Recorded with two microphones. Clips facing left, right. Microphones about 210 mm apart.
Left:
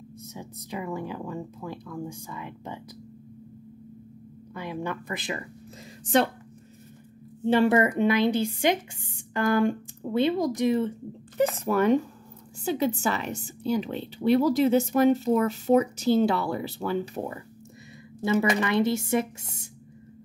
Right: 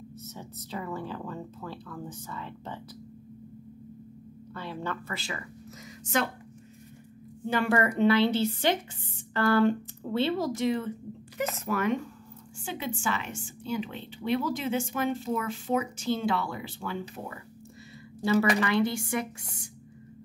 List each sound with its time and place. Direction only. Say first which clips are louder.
0.2 s speech: left 5 dB; 15° left (ahead or behind)
4.6 s speech: left 3 dB; 15° left (ahead or behind)
7.4 s a woman's voice: left 6 dB; 25° left (ahead or behind)
11.3 s a woman's voice: left 7 dB; 30° left (ahead or behind)
18.2 s a woman's voice: left 1 dB; 20° left (ahead or behind)